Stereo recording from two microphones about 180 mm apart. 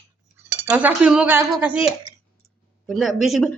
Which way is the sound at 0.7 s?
10° right (ahead or behind).